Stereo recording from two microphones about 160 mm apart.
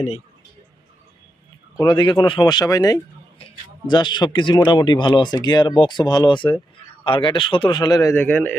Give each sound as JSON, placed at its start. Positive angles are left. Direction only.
{"t": 1.8, "sound": "a man's voice", "side_deg": 30}